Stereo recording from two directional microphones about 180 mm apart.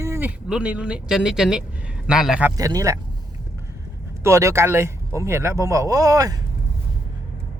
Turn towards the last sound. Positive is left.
turn(degrees=-20)  # may be behind; listen again after turning